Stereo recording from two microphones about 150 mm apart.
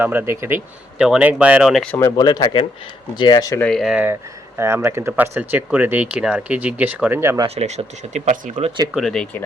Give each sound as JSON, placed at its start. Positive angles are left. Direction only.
{"t": 0.0, "sound": "speech", "side_deg": -15}
{"t": 1.9, "sound": "speech", "side_deg": 20}
{"t": 3.6, "sound": "speech", "side_deg": 0}
{"t": 7.4, "sound": "speech", "side_deg": -45}
{"t": 8.5, "sound": "speech", "side_deg": -35}
{"t": 8.9, "sound": "speech", "side_deg": 0}